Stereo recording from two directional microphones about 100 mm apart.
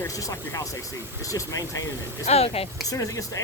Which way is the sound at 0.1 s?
35° left (ahead or behind).